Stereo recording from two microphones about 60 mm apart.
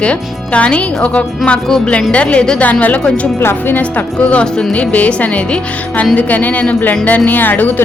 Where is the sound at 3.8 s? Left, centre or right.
Left.